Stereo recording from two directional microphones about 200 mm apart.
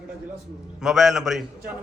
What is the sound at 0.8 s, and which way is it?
Speech, centre (ahead or behind).